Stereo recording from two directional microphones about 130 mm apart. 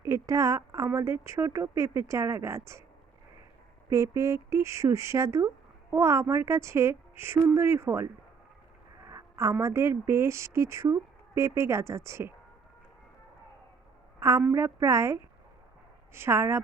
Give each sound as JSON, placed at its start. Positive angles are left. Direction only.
{"t": 0.0, "sound": "a woman's voice", "side_deg": -25}
{"t": 3.8, "sound": "speech", "side_deg": -25}
{"t": 14.2, "sound": "a woman's voice", "side_deg": -20}